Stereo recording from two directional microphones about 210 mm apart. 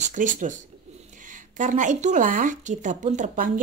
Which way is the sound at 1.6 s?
35° right (ahead or behind).